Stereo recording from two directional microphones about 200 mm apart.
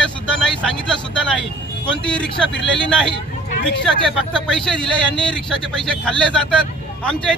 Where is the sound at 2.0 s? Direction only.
5° left (ahead or behind).